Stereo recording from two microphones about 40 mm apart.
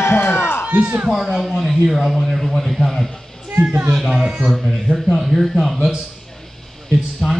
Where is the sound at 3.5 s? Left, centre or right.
Right.